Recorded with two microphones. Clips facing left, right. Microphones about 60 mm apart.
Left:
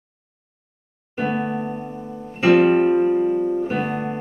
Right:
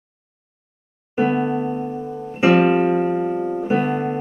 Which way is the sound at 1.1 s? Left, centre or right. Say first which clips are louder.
Right 4 dB; centre.